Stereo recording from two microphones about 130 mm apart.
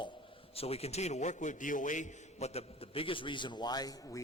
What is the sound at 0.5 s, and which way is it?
A man's voice, 50° left (ahead or behind).